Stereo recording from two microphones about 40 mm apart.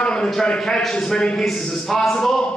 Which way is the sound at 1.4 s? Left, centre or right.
Centre.